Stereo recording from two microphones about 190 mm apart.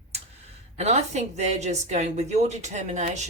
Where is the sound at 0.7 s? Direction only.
35° right (ahead or behind).